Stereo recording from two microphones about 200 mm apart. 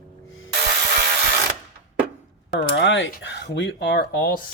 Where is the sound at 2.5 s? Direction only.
65° left (ahead or behind).